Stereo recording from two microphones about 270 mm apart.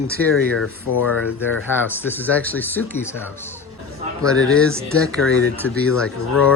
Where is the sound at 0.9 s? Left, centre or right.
Left.